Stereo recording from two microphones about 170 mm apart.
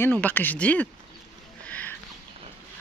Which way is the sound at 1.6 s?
10° left (ahead or behind).